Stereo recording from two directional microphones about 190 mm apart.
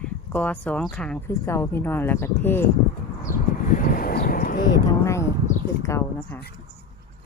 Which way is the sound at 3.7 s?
45° left (ahead or behind).